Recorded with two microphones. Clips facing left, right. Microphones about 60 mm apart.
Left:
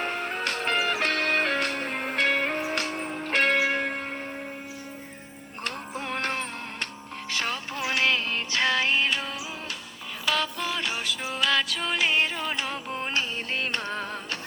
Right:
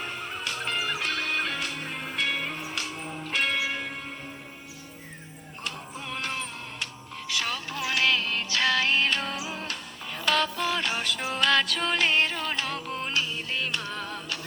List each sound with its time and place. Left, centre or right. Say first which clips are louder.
0.0 s music: left 5 dB; left
5.6 s music: left 4 dB; left
7.3 s music: left 1 dB; left; by 9.2 s centre
9.2 s music: right 2 dB; centre; by 13.1 s left
13.1 s music: left 1 dB; left